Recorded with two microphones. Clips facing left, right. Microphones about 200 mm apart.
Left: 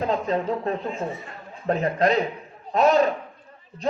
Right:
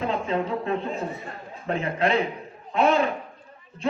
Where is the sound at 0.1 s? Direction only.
40° left (ahead or behind).